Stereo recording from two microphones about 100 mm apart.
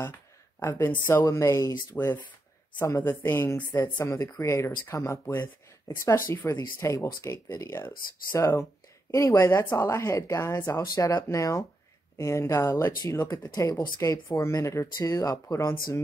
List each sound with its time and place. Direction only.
0.6 s speech: 25° left (ahead or behind)
2.8 s speech: 25° left (ahead or behind)